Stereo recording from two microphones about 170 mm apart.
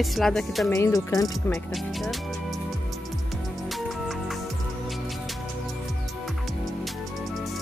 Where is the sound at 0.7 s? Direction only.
15° left (ahead or behind).